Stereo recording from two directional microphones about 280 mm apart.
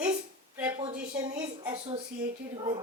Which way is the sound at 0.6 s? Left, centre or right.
Centre.